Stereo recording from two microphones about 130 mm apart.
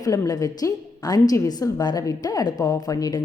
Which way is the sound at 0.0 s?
25° left (ahead or behind).